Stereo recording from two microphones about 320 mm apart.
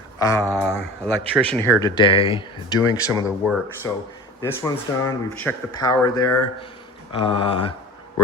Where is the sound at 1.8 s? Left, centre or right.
Centre.